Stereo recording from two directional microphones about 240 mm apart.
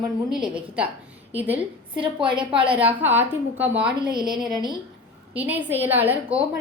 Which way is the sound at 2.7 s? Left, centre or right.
Centre.